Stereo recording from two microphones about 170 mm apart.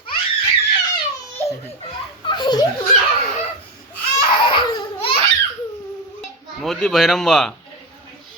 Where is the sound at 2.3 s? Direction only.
25° left (ahead or behind).